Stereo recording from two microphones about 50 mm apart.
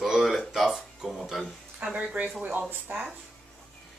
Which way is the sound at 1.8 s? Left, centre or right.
Right.